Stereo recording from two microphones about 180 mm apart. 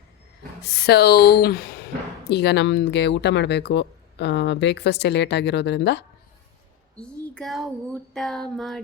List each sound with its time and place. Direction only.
0.6 s speech: 65° left (ahead or behind)
6.9 s a child's voice: 5° left (ahead or behind)
8.1 s a sound: 5° left (ahead or behind)